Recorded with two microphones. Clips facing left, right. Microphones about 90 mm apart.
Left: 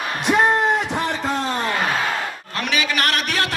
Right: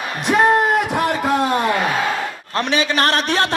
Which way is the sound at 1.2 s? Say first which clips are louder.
Right 5 dB; 15° right (ahead or behind).